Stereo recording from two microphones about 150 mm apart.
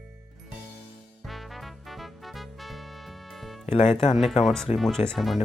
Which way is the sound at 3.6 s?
45° left (ahead or behind).